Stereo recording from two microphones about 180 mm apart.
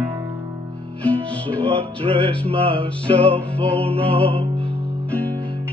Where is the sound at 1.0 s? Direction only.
5° left (ahead or behind).